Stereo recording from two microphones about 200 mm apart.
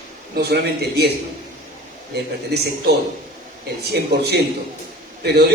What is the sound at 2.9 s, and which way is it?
Speech, 50° right (ahead or behind).